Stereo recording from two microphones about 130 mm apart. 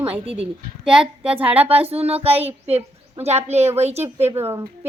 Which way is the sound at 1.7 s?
10° right (ahead or behind).